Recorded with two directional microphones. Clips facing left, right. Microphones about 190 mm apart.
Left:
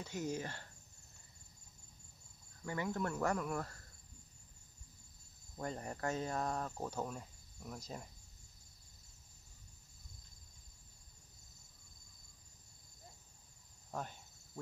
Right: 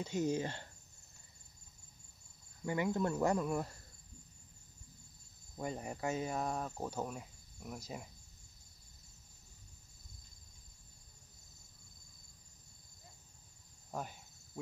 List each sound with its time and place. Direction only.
0.0 s speech: 20° right (ahead or behind)
2.6 s speech: 20° right (ahead or behind)
5.6 s speech: 10° right (ahead or behind)
13.9 s cricket: 10° right (ahead or behind)